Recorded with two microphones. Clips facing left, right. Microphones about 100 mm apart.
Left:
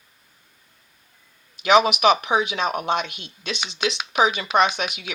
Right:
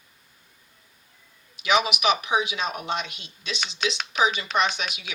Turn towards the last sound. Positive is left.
turn(degrees=50)  # may be behind; listen again after turning